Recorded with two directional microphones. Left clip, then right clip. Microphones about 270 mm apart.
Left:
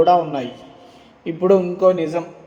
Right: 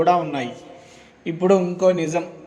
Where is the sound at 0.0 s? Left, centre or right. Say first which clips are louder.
Left 3 dB; right.